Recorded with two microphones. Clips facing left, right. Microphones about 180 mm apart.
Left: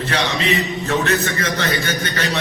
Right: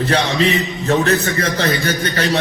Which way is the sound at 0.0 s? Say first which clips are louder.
Right 5 dB; 35° right (ahead or behind).